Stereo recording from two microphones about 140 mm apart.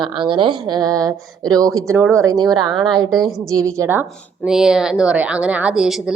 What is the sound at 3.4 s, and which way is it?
Speech, 20° right (ahead or behind).